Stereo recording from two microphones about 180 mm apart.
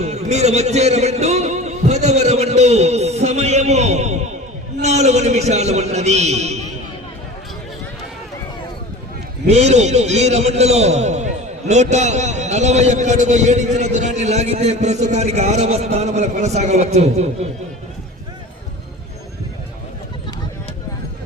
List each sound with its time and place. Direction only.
0.0 s music: 40° right (ahead or behind)
4.8 s a sound: 40° right (ahead or behind)
9.5 s a man's voice: 40° right (ahead or behind)